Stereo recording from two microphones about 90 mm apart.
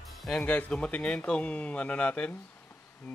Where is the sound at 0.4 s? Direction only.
20° left (ahead or behind).